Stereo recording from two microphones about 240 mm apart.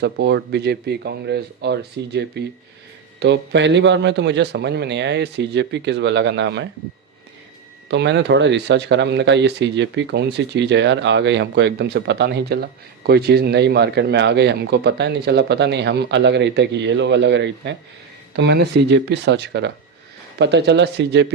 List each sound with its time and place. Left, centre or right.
0.0 s speech: right
7.9 s speech: right